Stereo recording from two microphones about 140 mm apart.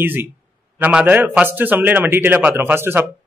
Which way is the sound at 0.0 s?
15° right (ahead or behind).